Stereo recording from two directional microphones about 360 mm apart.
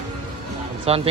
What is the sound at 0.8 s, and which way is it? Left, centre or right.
Speech, centre.